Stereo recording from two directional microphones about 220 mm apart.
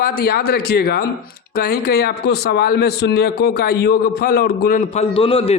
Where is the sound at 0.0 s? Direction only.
45° left (ahead or behind).